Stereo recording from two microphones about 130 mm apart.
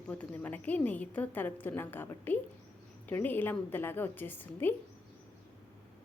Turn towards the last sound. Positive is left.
turn(degrees=15)  # may be behind; listen again after turning